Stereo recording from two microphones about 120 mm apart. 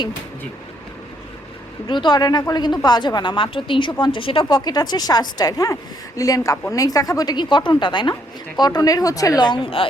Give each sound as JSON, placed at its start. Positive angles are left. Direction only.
{"t": 1.9, "sound": "speech", "side_deg": 40}
{"t": 4.4, "sound": "speech", "side_deg": 35}
{"t": 9.4, "sound": "speech", "side_deg": 45}